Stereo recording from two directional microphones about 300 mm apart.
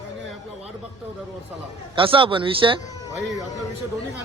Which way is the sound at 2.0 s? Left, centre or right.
Centre.